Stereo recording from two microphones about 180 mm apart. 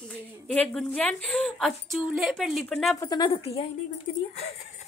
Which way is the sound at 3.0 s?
20° left (ahead or behind).